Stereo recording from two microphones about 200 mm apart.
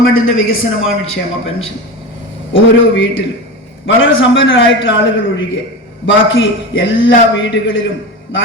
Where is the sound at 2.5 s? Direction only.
70° left (ahead or behind).